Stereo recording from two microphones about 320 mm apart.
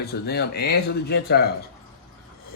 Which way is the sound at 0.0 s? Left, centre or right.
Left.